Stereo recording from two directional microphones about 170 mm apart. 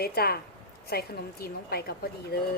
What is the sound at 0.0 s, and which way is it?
A woman's voice, 65° left (ahead or behind).